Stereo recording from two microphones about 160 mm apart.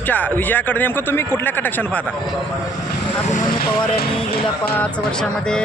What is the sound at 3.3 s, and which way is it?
Speech, 60° left (ahead or behind).